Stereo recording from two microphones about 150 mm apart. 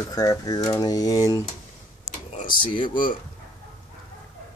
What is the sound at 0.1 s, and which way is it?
Speech, 25° left (ahead or behind).